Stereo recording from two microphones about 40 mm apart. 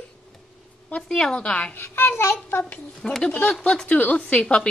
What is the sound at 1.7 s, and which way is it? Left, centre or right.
Speech, left.